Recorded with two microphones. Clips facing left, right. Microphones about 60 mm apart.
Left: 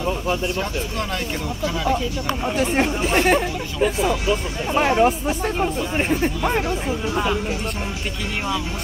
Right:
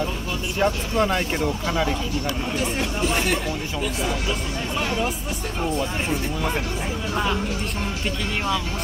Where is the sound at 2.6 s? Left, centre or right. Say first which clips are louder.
Left 6 dB; left.